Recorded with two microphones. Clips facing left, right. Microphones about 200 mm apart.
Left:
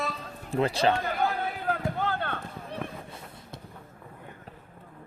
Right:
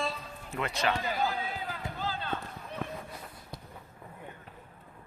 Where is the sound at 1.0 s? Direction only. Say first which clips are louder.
Left 3 dB; 55° left (ahead or behind).